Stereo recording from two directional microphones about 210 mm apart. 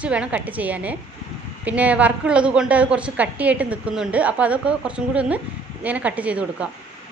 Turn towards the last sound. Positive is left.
turn(degrees=-5)  # may be behind; listen again after turning